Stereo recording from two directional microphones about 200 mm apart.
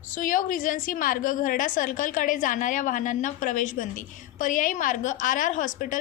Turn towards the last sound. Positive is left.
turn(degrees=40)  # may be behind; listen again after turning